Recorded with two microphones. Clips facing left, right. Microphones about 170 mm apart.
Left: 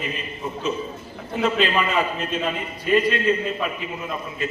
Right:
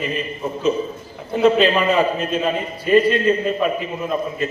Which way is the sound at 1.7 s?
35° right (ahead or behind).